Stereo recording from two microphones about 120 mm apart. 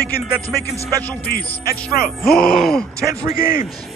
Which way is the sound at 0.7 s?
30° right (ahead or behind).